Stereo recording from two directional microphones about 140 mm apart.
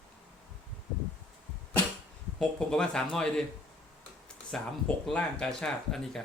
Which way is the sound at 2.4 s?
5° left (ahead or behind).